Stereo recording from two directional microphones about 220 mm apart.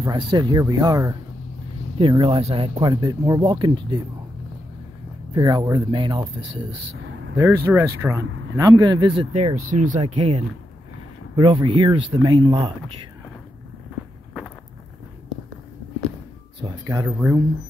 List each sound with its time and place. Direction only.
0.0 s speech: 20° right (ahead or behind)
5.3 s speech: 15° right (ahead or behind)
7.3 s speech: 10° right (ahead or behind)
16.6 s speech: 20° right (ahead or behind)